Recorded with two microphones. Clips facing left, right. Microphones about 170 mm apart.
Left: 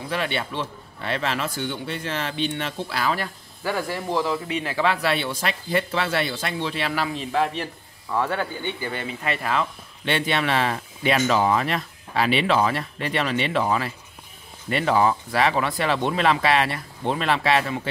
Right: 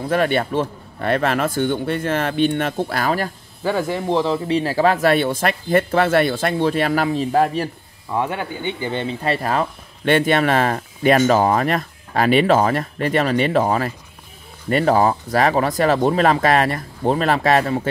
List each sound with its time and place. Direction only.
0.1 s speech: 50° right (ahead or behind)
3.6 s speech: 20° right (ahead or behind); by 7.7 s 40° right (ahead or behind)
8.1 s speech: 15° right (ahead or behind); by 17.8 s 45° right (ahead or behind)